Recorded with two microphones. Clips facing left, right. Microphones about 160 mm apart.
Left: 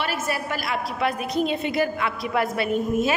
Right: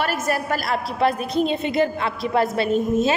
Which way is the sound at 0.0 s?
45° right (ahead or behind).